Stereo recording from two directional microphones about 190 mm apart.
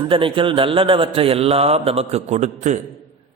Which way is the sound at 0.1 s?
25° right (ahead or behind).